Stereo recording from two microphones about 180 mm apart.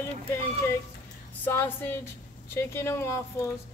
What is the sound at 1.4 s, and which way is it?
Speech, 10° left (ahead or behind).